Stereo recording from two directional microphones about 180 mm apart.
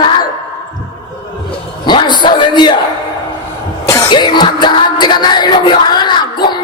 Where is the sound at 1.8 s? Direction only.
25° left (ahead or behind).